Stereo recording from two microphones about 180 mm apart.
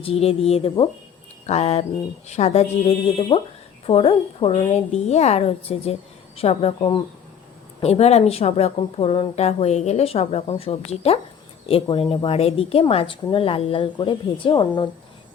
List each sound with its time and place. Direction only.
0.0 s a woman's voice: 35° left (ahead or behind)